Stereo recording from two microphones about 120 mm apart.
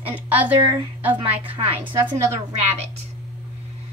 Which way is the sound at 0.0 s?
15° right (ahead or behind).